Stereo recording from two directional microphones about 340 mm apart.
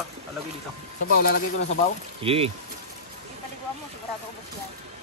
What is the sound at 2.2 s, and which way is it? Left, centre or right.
Speech, centre.